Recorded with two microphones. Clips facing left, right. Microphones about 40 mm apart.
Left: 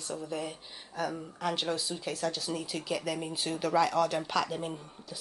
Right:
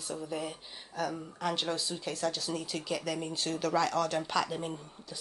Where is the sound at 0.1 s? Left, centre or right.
Centre.